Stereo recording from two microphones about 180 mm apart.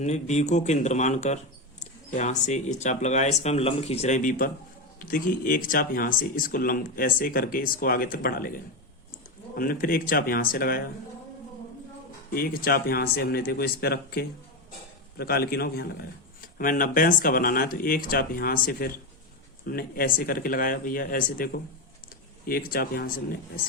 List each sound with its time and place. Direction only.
0.0 s speech: 40° left (ahead or behind); by 8.5 s 55° left (ahead or behind)
9.6 s speech: 55° left (ahead or behind)
12.3 s speech: 55° left (ahead or behind)